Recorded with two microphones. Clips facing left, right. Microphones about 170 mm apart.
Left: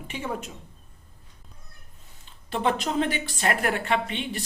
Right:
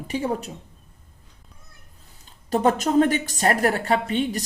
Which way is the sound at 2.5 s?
45° right (ahead or behind).